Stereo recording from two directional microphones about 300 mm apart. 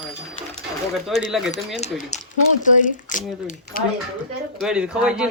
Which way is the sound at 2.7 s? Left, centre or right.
Left.